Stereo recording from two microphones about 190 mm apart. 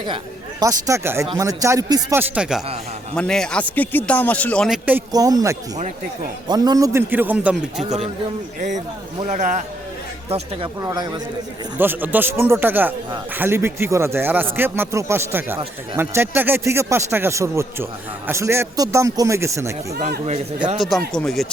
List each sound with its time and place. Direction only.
0.6 s a man's voice: 15° right (ahead or behind); by 4.8 s 5° left (ahead or behind)
4.9 s a man's voice: 15° right (ahead or behind)
7.9 s a man's voice: 35° right (ahead or behind)
9.2 s a man's voice: 40° right (ahead or behind)
10.8 s a man's voice: 20° right (ahead or behind)
20.7 s speech: centre (ahead or behind)